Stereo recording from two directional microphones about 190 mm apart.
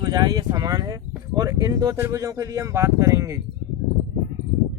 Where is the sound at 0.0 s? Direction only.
20° right (ahead or behind).